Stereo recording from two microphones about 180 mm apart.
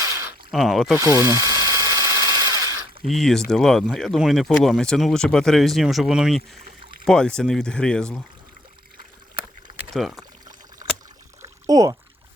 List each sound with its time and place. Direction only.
0.0 s a sound: 15° right (ahead or behind)
0.5 s speech: centre (ahead or behind)
1.2 s a sound: 15° right (ahead or behind)
3.0 s speech: centre (ahead or behind)
9.9 s speech: centre (ahead or behind)
11.4 s pour: 20° right (ahead or behind)